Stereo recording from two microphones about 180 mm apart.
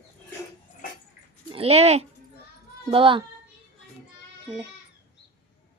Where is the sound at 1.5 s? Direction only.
35° right (ahead or behind).